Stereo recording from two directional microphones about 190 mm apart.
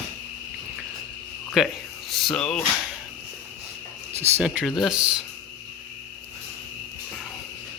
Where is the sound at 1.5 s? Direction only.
Centre (ahead or behind).